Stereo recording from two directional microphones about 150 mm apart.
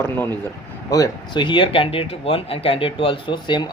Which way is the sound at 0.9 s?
30° left (ahead or behind).